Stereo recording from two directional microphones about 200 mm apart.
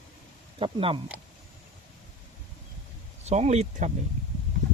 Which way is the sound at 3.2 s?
35° right (ahead or behind).